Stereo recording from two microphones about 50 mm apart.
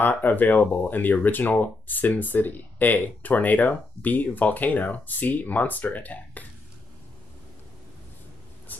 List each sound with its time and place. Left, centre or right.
0.0 s speech: left